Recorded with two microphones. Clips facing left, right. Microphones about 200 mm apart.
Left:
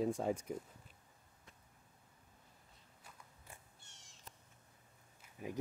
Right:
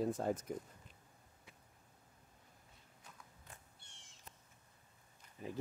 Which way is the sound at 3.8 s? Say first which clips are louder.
Even; 45° left (ahead or behind).